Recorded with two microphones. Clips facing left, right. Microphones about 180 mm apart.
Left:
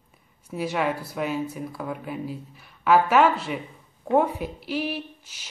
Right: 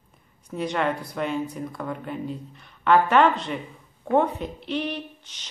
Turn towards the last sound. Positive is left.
turn(degrees=5)  # may be behind; listen again after turning